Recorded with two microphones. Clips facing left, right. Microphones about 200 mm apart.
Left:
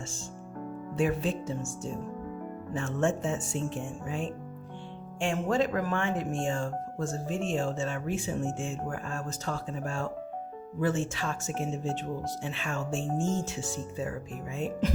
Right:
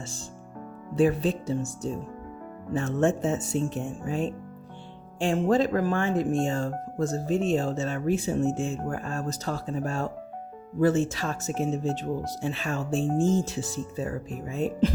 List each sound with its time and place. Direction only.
0.9 s speech: 35° right (ahead or behind)
5.2 s speech: 35° right (ahead or behind)